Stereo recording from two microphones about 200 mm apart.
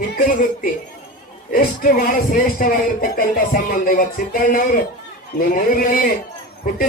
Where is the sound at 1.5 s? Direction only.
45° left (ahead or behind).